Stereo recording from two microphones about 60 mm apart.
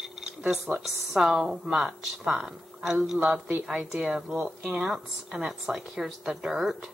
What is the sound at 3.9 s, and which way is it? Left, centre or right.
Speech, centre.